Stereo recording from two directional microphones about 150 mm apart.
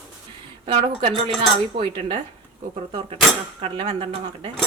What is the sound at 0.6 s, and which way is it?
A woman's voice, 35° right (ahead or behind).